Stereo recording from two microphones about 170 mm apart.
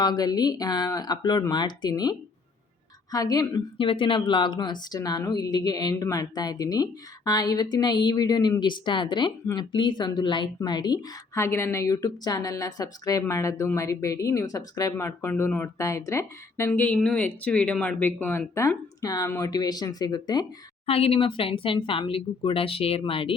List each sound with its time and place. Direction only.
0.0 s a woman's voice: 25° left (ahead or behind)
20.8 s speech: 35° left (ahead or behind)